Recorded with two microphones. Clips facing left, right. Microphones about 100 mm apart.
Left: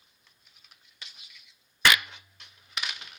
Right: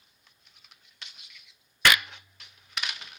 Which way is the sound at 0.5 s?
Centre (ahead or behind).